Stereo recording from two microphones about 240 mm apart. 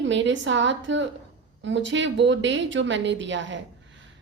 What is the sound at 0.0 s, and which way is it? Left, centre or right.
A woman's voice, right.